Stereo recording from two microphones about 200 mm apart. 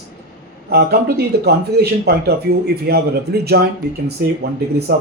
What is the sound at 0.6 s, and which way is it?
Speech, 50° right (ahead or behind).